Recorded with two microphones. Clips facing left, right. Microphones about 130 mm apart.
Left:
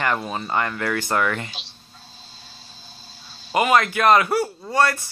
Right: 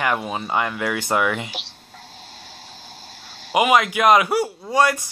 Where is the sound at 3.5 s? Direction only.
10° right (ahead or behind).